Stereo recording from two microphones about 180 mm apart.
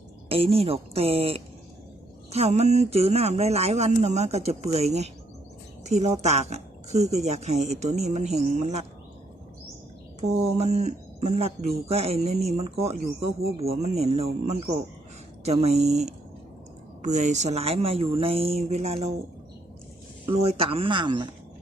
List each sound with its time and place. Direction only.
0.3 s speech: 30° right (ahead or behind)
10.2 s speech: 40° right (ahead or behind)
20.2 s speech: 30° right (ahead or behind)